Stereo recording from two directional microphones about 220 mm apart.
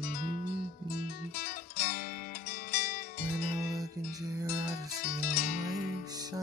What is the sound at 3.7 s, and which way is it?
Music, 15° right (ahead or behind).